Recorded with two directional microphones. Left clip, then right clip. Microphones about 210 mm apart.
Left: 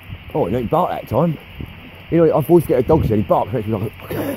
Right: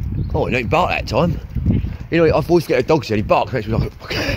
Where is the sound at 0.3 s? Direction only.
10° left (ahead or behind).